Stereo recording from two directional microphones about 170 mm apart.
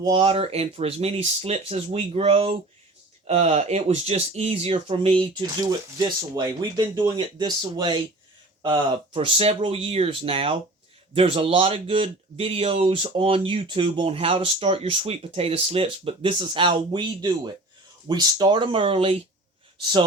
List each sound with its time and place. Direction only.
0.0 s speech: 30° right (ahead or behind)